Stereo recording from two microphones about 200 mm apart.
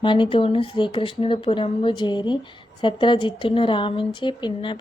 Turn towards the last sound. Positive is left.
turn(degrees=25)  # may be behind; listen again after turning